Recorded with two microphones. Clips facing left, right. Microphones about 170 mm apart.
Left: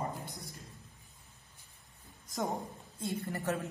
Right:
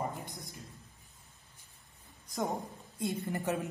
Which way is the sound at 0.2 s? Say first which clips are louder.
Even; 15° right (ahead or behind).